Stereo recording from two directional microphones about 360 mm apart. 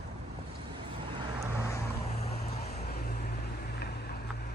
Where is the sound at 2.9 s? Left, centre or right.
Left.